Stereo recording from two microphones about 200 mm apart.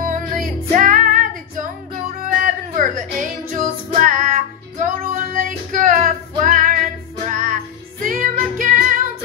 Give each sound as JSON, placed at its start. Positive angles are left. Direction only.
{"t": 0.0, "sound": "music", "side_deg": -40}
{"t": 8.0, "sound": "music", "side_deg": -40}